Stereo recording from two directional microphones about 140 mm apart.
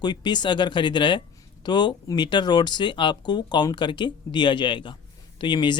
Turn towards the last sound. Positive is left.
turn(degrees=35)  # may be behind; listen again after turning